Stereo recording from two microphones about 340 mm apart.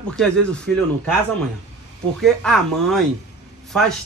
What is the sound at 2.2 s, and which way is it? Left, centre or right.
Speech, centre.